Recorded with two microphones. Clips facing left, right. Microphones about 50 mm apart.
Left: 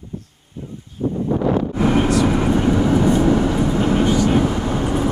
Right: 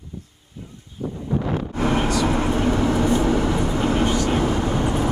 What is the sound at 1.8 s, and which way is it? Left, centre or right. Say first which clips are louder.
Vehicle: left 2 dB; centre.